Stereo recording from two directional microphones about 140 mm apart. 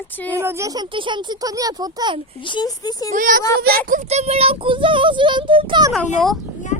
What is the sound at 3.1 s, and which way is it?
Speech, 70° right (ahead or behind).